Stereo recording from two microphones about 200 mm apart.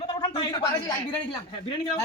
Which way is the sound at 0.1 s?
25° left (ahead or behind).